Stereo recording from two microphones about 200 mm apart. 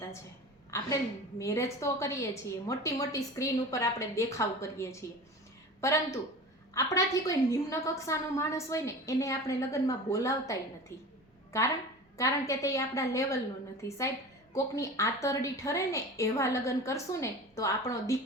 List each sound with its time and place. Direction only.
0.7 s a woman's voice: 15° left (ahead or behind)
12.1 s a woman's voice: 15° left (ahead or behind)